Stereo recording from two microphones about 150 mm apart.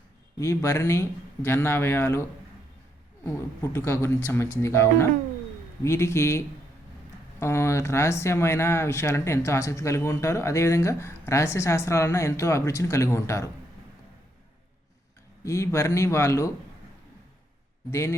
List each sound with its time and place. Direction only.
0.3 s a man's voice: 20° left (ahead or behind)
3.2 s a man's voice: 15° left (ahead or behind)
15.4 s speech: 20° left (ahead or behind)